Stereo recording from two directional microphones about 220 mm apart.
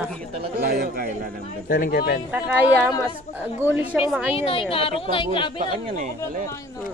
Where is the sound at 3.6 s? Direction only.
10° right (ahead or behind).